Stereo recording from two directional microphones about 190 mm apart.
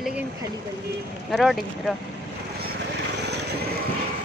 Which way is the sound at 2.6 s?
55° right (ahead or behind).